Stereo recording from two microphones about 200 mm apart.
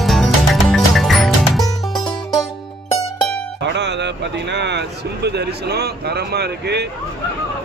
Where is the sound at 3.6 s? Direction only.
60° right (ahead or behind).